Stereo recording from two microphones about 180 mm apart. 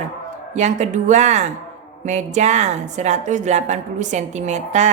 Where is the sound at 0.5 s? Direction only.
40° right (ahead or behind).